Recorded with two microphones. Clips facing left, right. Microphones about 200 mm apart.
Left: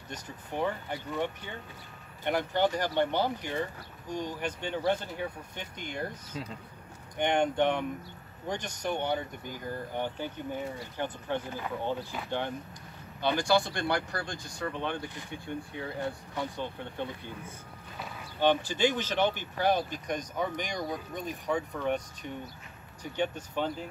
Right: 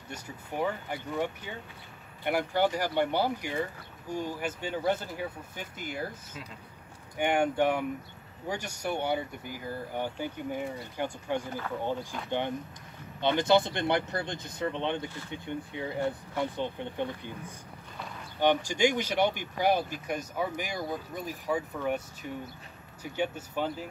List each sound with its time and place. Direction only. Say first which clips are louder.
0.1 s speech: even; 10° right (ahead or behind)
7.2 s speech: even; 10° right (ahead or behind)
18.4 s speech: right 1 dB; 15° right (ahead or behind)